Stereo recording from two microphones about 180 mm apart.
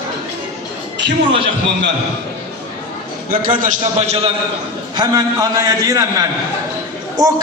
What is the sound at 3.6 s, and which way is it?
Speech, 40° right (ahead or behind).